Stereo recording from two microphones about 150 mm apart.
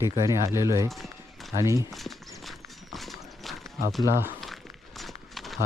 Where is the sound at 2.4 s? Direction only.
Centre (ahead or behind).